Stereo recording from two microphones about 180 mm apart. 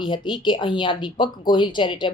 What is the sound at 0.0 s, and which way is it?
A woman's voice, 25° left (ahead or behind).